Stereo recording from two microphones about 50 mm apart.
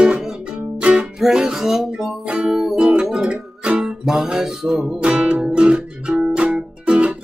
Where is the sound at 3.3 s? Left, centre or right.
Right.